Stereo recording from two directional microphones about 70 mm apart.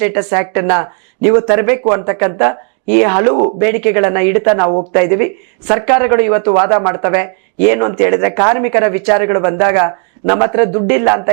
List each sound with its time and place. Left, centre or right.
0.0 s speech: centre